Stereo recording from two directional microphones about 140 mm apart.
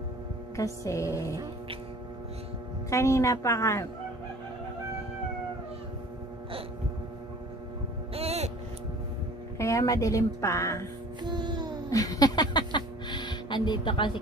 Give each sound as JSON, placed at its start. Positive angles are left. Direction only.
{"t": 0.6, "sound": "speech", "side_deg": 20}
{"t": 2.9, "sound": "speech", "side_deg": 20}
{"t": 8.1, "sound": "hum", "side_deg": -45}
{"t": 9.6, "sound": "speech", "side_deg": 25}
{"t": 11.2, "sound": "music", "side_deg": -30}
{"t": 11.9, "sound": "speech", "side_deg": 25}